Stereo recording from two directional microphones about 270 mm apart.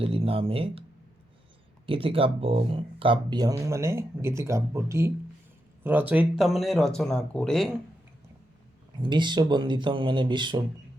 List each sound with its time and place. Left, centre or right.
0.0 s speech: right
1.9 s speech: centre
9.0 s speech: centre